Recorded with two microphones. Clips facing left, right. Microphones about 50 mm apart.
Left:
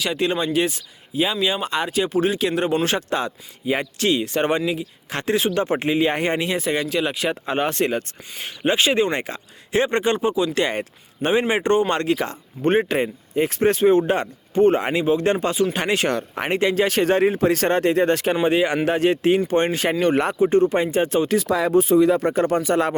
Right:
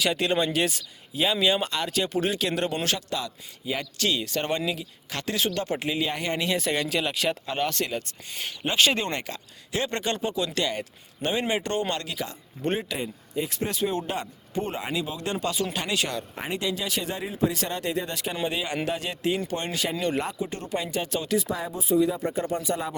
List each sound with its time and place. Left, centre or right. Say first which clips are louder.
0.0 s speech: left 2 dB; centre
1.7 s speech: left 6 dB; centre
2.8 s speech: left 7 dB; left; by 4.9 s centre
5.0 s speech: left 6 dB; left
5.7 s speech: left 8 dB; left
6.4 s speech: left 4 dB; centre
7.4 s speech: left 6 dB; left
7.9 s speech: left 8 dB; left
8.4 s speech: left 3 dB; left
9.2 s speech: left 5 dB; left
10.6 s speech: left 6 dB; left
14.9 s speech: left 11 dB; left
18.4 s speech: left 8 dB; left
21.3 s speech: left 10 dB; left